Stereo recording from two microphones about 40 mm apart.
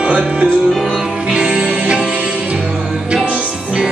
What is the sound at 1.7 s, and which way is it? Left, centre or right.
Music, right.